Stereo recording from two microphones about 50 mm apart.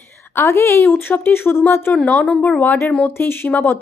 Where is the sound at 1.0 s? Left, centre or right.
Left.